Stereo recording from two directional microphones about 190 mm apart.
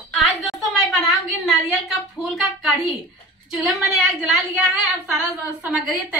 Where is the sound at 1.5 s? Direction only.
Centre (ahead or behind).